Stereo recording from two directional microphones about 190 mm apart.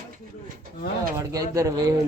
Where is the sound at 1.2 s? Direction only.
20° right (ahead or behind).